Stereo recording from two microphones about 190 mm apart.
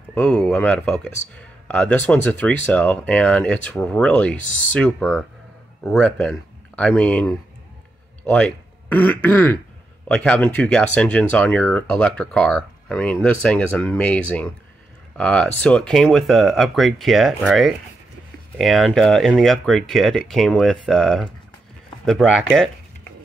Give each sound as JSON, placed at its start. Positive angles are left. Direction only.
{"t": 0.1, "sound": "speech", "side_deg": 5}